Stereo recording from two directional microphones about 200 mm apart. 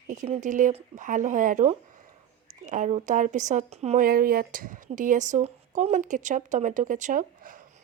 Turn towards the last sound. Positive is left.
turn(degrees=-40)  # may be behind; listen again after turning